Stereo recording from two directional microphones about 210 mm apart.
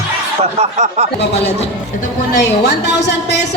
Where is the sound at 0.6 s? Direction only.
30° right (ahead or behind).